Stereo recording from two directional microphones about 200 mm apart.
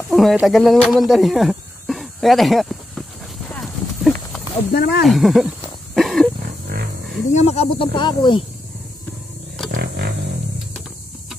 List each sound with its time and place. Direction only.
0.1 s a sound: centre (ahead or behind)
4.7 s speech: 55° left (ahead or behind)
5.0 s speech: centre (ahead or behind)
5.9 s wild animals: centre (ahead or behind)
7.3 s speech: 30° left (ahead or behind)
9.7 s vehicle: 55° right (ahead or behind)